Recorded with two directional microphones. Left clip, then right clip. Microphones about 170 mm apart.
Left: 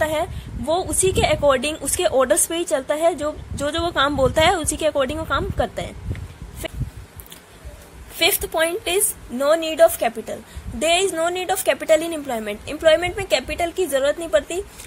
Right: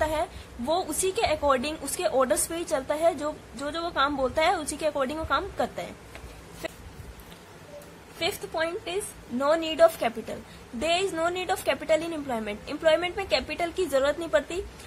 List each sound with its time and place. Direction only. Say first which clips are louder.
0.0 s a woman's voice: left 6 dB; 30° left (ahead or behind)
6.6 s a sound: left 5 dB; 20° left (ahead or behind)
8.2 s a woman's voice: left 9 dB; 30° left (ahead or behind)
9.4 s a woman's voice: left 6 dB; 15° left (ahead or behind)